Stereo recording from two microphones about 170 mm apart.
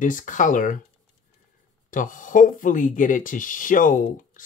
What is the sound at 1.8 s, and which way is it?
Speech, 50° left (ahead or behind).